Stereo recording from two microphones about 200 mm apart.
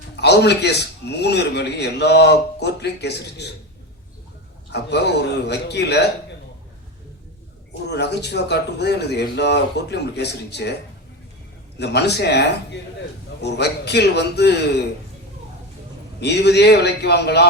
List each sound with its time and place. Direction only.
0.2 s a man's voice: 55° left (ahead or behind)
4.7 s a man's voice: 55° left (ahead or behind)
7.9 s a man's voice: 55° left (ahead or behind)
11.8 s a man's voice: 55° left (ahead or behind)
16.2 s a man's voice: 55° left (ahead or behind)